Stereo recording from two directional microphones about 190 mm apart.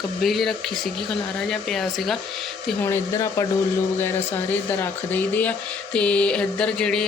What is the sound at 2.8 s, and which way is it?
Speech, 15° left (ahead or behind).